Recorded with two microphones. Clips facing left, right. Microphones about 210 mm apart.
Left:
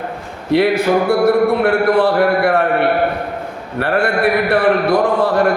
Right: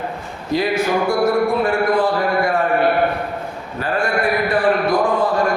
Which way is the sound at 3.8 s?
65° left (ahead or behind).